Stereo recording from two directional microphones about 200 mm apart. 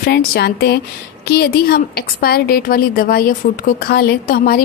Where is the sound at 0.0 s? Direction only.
50° left (ahead or behind).